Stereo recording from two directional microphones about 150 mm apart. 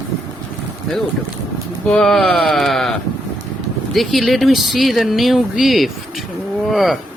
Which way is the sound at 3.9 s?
Centre (ahead or behind).